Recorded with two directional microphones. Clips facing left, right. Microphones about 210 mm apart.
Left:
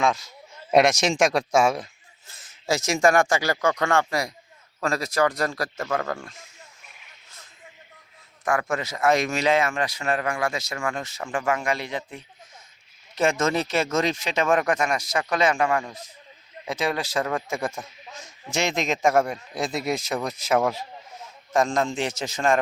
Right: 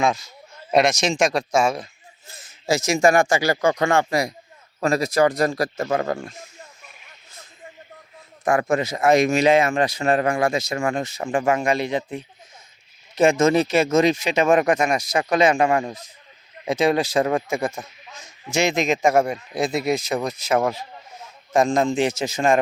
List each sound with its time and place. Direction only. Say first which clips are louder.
0.0 s speech: right 2 dB; 5° right (ahead or behind)
0.7 s speech: even; 10° left (ahead or behind)
2.6 s speech: right 3 dB; centre (ahead or behind); by 6.3 s 20° right (ahead or behind)
8.4 s speech: right 5 dB; 20° right (ahead or behind)
10.5 s speech: right 6 dB; 20° right (ahead or behind)
17.5 s a man's voice: right 4 dB; 5° right (ahead or behind)